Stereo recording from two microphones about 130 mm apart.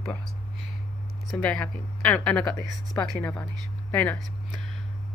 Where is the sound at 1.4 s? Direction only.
10° left (ahead or behind).